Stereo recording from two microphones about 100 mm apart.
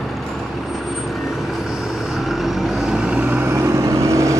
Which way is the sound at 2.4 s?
10° right (ahead or behind).